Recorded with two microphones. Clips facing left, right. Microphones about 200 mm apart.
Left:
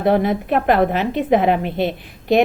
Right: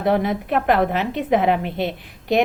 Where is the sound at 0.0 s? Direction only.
30° left (ahead or behind).